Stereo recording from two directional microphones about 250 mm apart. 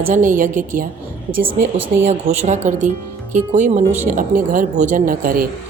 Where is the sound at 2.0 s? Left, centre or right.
Right.